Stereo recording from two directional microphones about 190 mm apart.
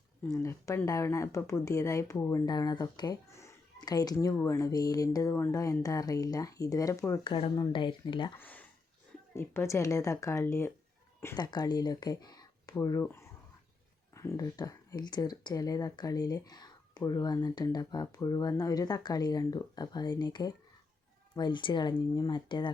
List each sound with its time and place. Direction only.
0.3 s speech: 15° left (ahead or behind)
7.3 s speech: 25° left (ahead or behind)
8.4 s speech: 10° left (ahead or behind); by 22.7 s 25° left (ahead or behind)